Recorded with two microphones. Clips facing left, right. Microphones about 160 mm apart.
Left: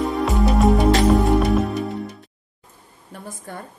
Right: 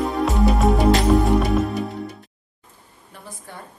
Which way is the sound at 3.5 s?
50° left (ahead or behind).